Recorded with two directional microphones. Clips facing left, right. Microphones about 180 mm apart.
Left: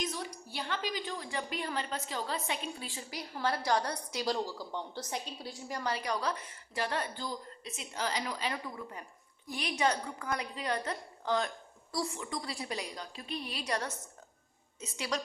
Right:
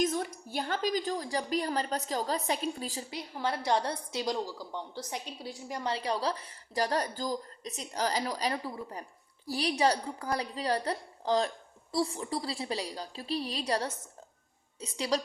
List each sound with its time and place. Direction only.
0.0 s a woman's voice: 50° right (ahead or behind)
3.1 s a woman's voice: 20° right (ahead or behind)
4.7 s a woman's voice: 10° right (ahead or behind); by 15.2 s 35° right (ahead or behind)